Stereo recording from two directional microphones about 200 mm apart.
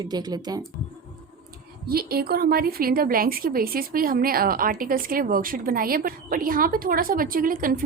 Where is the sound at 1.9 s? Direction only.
50° right (ahead or behind).